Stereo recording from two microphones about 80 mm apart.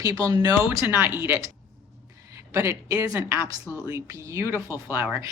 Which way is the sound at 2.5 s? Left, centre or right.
Right.